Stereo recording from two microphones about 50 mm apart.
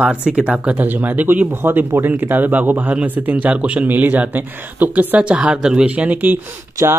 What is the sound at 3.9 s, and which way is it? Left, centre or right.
Speech, right.